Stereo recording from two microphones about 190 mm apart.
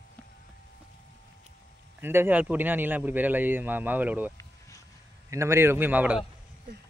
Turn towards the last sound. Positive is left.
turn(degrees=-5)  # may be behind; listen again after turning